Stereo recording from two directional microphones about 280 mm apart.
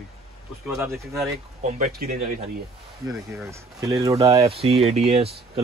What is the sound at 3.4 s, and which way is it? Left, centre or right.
Speech, centre.